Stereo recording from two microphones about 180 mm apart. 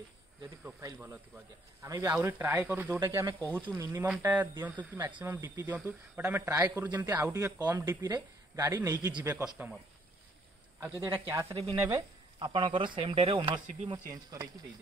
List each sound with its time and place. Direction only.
0.7 s a man's voice: 15° right (ahead or behind)
10.8 s a man's voice: 10° right (ahead or behind)
12.4 s speech: 25° right (ahead or behind)